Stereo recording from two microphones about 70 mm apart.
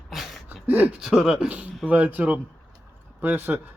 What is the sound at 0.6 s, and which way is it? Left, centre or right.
Speech, right.